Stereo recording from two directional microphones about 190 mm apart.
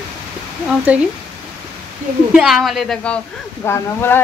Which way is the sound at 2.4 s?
Centre (ahead or behind).